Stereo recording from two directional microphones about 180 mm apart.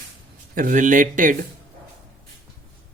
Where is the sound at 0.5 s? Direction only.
50° right (ahead or behind).